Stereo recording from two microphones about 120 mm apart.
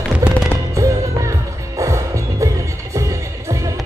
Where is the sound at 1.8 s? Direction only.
25° right (ahead or behind).